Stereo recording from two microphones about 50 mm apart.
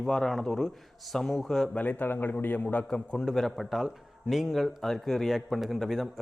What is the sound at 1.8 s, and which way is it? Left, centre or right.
Speech, left.